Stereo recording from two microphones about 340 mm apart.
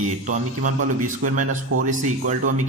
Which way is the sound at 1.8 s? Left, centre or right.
Right.